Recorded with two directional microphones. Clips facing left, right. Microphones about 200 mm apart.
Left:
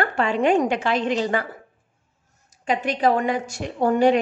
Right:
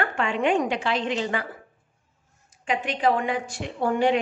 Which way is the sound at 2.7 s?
40° left (ahead or behind).